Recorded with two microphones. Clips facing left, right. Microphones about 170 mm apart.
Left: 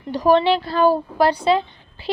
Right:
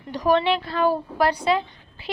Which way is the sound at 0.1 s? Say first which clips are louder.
Left 4 dB; 30° left (ahead or behind).